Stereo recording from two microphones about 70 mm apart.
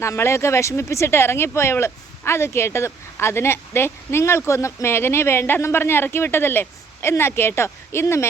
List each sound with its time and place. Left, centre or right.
0.0 s speech: left